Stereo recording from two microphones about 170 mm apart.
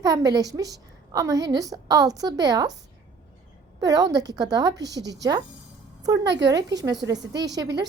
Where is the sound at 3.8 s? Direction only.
20° right (ahead or behind).